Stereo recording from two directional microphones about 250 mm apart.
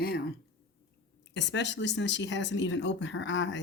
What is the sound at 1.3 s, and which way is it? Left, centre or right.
Speech, left.